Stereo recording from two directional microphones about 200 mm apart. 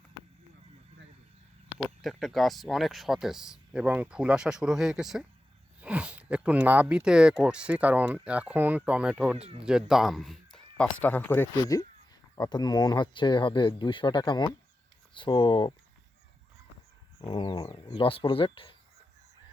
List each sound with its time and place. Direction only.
2.0 s speech: centre (ahead or behind); by 15.7 s 20° left (ahead or behind)
17.2 s speech: 25° left (ahead or behind)